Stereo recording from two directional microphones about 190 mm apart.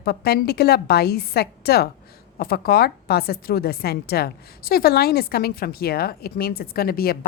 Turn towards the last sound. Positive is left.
turn(degrees=55)  # may be behind; listen again after turning